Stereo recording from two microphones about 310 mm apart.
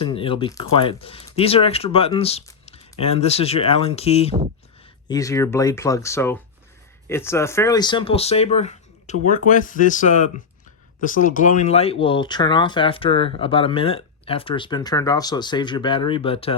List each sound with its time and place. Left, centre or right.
0.0 s speech: centre